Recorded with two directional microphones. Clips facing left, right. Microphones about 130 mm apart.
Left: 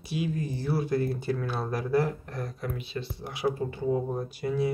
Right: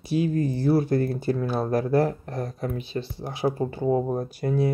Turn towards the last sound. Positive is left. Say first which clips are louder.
# right 4 dB
turn(degrees=-45)  # may be behind; listen again after turning